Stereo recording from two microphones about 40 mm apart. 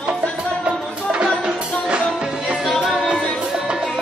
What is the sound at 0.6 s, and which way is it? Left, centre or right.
Music, right.